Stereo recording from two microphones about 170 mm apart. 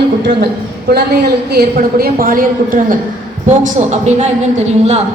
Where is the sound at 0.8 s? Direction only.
70° right (ahead or behind); by 3.0 s 55° right (ahead or behind).